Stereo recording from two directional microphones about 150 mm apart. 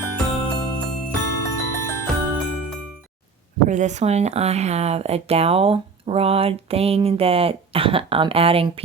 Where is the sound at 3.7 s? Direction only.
50° right (ahead or behind).